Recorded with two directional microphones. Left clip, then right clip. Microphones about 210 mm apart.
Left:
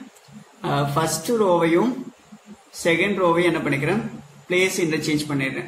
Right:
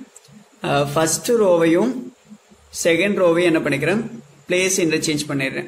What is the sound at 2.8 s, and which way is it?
A man's voice, 50° right (ahead or behind).